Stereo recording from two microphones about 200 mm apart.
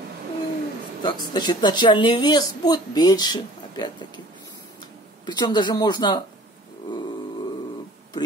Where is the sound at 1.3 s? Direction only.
20° left (ahead or behind).